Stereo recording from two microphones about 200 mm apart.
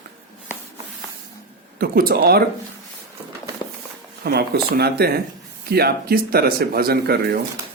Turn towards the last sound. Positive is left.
turn(degrees=-50)  # may be behind; listen again after turning